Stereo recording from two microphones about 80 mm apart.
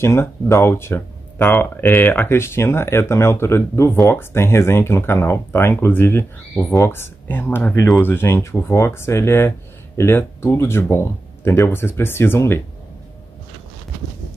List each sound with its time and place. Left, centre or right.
0.0 s speech: left